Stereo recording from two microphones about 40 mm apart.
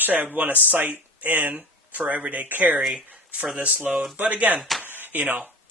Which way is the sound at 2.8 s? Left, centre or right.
Centre.